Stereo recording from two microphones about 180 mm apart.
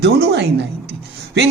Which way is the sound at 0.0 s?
70° right (ahead or behind).